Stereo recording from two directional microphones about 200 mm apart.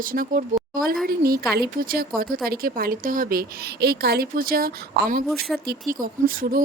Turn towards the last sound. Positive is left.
turn(degrees=-45)  # may be behind; listen again after turning